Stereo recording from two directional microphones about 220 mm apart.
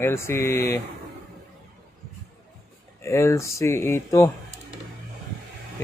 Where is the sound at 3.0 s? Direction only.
15° left (ahead or behind).